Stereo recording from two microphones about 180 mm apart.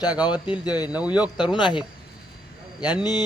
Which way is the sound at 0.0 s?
20° left (ahead or behind).